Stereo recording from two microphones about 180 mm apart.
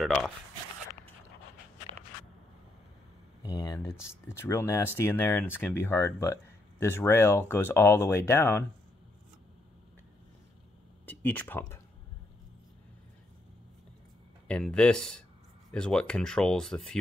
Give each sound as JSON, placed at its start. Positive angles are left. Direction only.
{"t": 0.0, "sound": "speech", "side_deg": 0}
{"t": 3.4, "sound": "speech", "side_deg": 20}
{"t": 11.1, "sound": "speech", "side_deg": 10}
{"t": 14.5, "sound": "speech", "side_deg": 5}